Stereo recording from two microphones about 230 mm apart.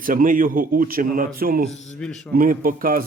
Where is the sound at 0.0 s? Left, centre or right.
Right.